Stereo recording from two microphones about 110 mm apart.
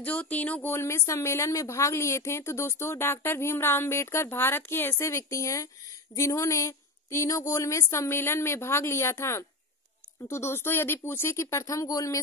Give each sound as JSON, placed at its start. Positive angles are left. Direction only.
{"t": 0.0, "sound": "speech", "side_deg": 15}